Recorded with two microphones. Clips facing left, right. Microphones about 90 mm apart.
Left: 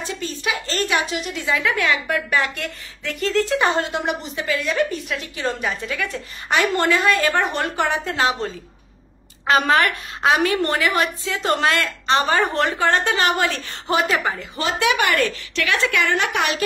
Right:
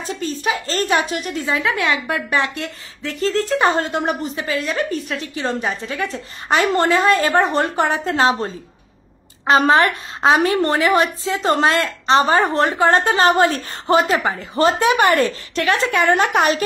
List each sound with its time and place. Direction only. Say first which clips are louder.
0.0 s a woman's voice: right 4 dB; 40° right (ahead or behind)